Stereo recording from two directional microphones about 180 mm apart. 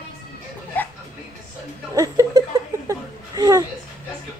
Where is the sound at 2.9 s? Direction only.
20° right (ahead or behind).